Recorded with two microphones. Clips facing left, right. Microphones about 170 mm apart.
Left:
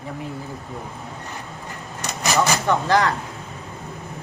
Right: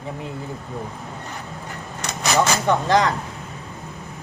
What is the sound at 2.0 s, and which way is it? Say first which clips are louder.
Vehicle: right 1 dB; 5° left (ahead or behind).